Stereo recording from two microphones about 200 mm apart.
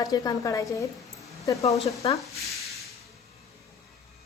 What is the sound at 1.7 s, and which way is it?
Speech, centre (ahead or behind).